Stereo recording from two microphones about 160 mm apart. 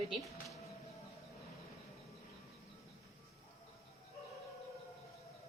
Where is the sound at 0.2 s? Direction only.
Centre (ahead or behind).